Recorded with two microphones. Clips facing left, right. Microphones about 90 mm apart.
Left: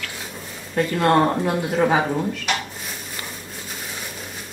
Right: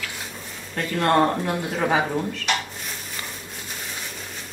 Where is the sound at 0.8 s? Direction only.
10° left (ahead or behind).